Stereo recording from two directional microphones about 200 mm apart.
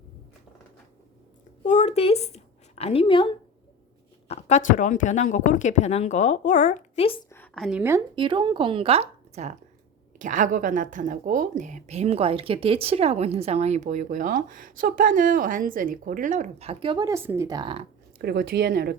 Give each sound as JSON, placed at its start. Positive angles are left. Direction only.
{"t": 1.6, "sound": "a sound", "side_deg": 35}
{"t": 4.3, "sound": "a woman's voice", "side_deg": 35}
{"t": 7.3, "sound": "a woman's voice", "side_deg": 10}
{"t": 8.1, "sound": "speech", "side_deg": -25}
{"t": 18.2, "sound": "speech", "side_deg": -50}